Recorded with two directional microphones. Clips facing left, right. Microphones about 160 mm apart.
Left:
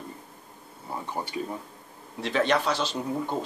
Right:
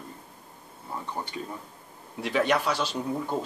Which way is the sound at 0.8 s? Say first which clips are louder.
Left 2 dB; 15° left (ahead or behind).